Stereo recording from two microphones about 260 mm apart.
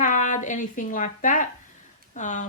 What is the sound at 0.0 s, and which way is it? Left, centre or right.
A woman's voice, left.